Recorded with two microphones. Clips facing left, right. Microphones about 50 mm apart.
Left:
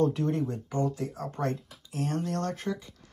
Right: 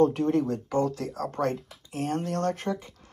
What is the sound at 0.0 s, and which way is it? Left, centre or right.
Speech, right.